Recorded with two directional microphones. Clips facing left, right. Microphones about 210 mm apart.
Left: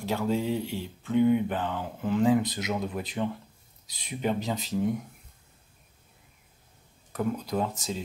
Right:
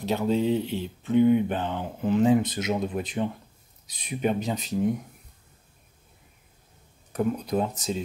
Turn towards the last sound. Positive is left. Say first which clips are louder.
# right 3 dB
turn(degrees=-20)  # may be behind; listen again after turning